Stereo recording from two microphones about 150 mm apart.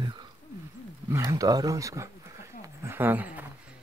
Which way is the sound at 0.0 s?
30° right (ahead or behind).